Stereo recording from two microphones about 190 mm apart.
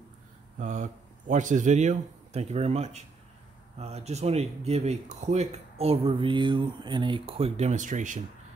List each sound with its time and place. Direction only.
0.6 s speech: 40° right (ahead or behind)